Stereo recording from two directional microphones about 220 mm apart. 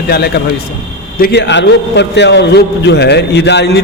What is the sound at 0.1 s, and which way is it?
A man's voice, 45° left (ahead or behind).